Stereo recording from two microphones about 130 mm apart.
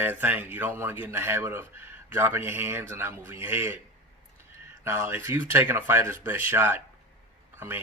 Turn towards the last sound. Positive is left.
turn(degrees=-15)  # may be behind; listen again after turning